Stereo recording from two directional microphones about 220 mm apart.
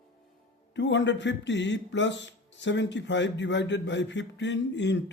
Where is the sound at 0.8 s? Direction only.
55° left (ahead or behind).